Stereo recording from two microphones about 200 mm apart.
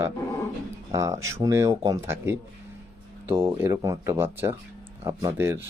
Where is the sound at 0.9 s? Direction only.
15° right (ahead or behind).